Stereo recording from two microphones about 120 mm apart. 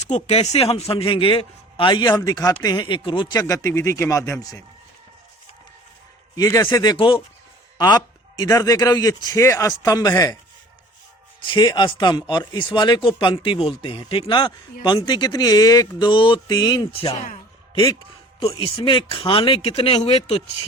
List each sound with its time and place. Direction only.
0.0 s a man's voice: 65° left (ahead or behind); by 3.4 s 40° left (ahead or behind)
3.4 s speech: 25° left (ahead or behind)
6.3 s speech: 30° left (ahead or behind)
6.6 s speech: 20° left (ahead or behind)
6.9 s a man's voice: 45° left (ahead or behind)
7.8 s speech: 35° left (ahead or behind)
11.4 s speech: 40° left (ahead or behind)
16.0 s speech: 45° left (ahead or behind)
16.9 s a man's voice: 50° left (ahead or behind)
18.3 s a man's voice: 50° left (ahead or behind)